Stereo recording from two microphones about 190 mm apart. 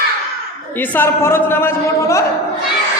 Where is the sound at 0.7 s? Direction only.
10° left (ahead or behind).